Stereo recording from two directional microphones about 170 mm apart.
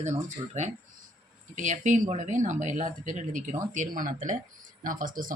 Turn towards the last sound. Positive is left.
turn(degrees=-55)  # may be behind; listen again after turning